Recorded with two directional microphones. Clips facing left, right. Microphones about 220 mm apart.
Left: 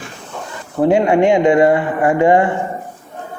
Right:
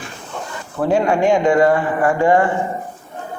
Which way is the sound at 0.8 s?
20° left (ahead or behind).